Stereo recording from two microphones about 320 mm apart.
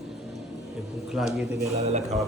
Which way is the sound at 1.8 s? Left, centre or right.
Right.